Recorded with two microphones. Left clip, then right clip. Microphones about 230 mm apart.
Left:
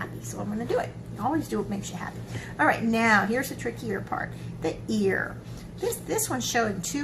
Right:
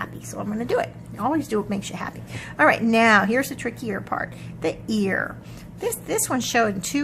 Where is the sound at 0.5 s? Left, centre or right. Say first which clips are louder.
Right 4 dB; right.